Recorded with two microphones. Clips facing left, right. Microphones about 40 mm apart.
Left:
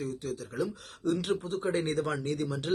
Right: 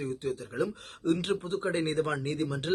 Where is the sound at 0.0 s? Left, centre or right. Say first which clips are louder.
Right 2 dB; right.